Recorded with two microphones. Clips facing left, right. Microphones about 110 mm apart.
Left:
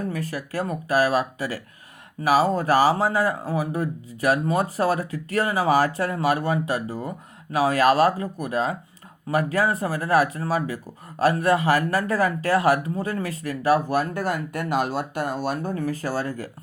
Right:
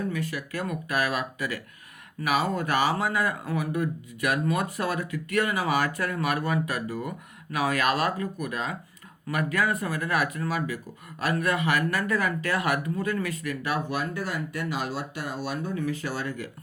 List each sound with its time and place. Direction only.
0.1 s speech: 40° left (ahead or behind)